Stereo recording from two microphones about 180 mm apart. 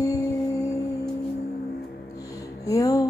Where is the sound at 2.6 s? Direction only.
20° left (ahead or behind).